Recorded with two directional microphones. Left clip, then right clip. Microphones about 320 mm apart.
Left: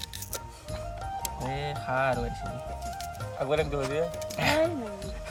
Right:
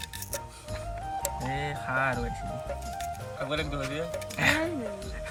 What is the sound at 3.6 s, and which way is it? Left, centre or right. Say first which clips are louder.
Speech: left 4 dB; left.